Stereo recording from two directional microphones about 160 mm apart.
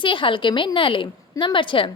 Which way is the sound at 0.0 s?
30° left (ahead or behind).